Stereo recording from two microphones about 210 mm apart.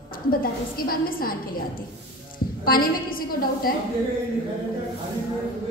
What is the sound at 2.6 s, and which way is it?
A woman's voice, 45° left (ahead or behind).